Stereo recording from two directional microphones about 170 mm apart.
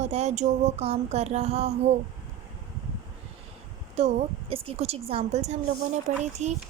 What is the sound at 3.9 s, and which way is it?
A woman's voice, 35° right (ahead or behind).